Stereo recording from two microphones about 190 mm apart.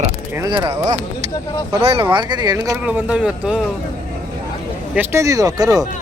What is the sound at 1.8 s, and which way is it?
Speech, 30° right (ahead or behind).